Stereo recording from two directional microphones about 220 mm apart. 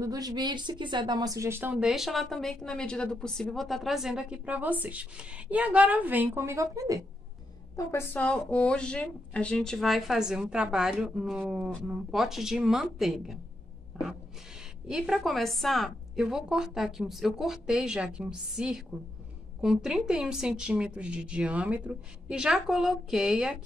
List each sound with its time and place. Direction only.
0.0 s a woman's voice: 15° right (ahead or behind)
7.7 s a woman's voice: 10° left (ahead or behind)
14.9 s a woman's voice: centre (ahead or behind)